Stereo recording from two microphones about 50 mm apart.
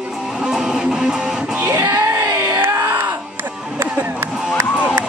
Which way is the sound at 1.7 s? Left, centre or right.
Right.